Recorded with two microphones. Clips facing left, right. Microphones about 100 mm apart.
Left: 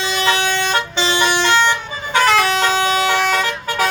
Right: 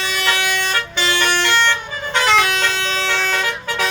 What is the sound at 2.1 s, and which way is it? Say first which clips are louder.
Vehicle horn: left 2 dB; 5° left (ahead or behind).